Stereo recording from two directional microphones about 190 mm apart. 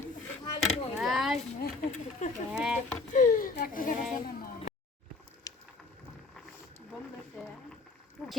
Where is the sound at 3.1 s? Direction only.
45° left (ahead or behind).